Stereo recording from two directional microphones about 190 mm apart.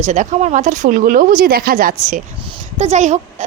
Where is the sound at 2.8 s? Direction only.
35° right (ahead or behind).